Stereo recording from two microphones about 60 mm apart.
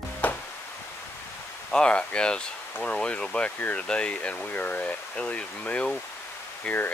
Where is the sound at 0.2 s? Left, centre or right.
Left.